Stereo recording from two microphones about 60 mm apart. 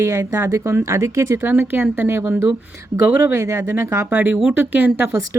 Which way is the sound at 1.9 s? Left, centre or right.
Right.